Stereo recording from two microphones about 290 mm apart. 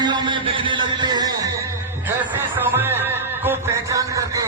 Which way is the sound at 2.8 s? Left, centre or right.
Centre.